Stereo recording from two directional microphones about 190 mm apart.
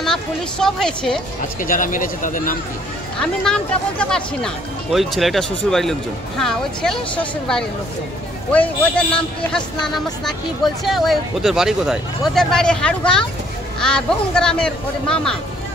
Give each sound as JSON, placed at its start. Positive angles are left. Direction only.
{"t": 0.0, "sound": "speech", "side_deg": 0}
{"t": 1.6, "sound": "a man's voice", "side_deg": 45}
{"t": 3.2, "sound": "speech", "side_deg": 5}
{"t": 8.5, "sound": "a man's voice", "side_deg": 5}
{"t": 10.2, "sound": "speech", "side_deg": 0}